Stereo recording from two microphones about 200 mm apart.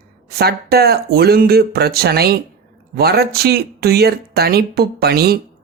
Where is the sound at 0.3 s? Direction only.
50° right (ahead or behind).